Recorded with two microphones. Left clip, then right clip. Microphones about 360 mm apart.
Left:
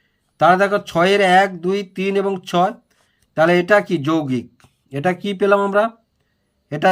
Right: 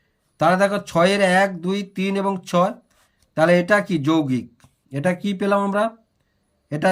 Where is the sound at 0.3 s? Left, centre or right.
Centre.